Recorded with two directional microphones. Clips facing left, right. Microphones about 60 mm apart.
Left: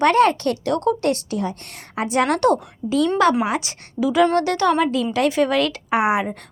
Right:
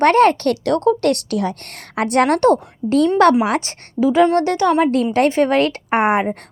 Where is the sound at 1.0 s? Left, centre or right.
Right.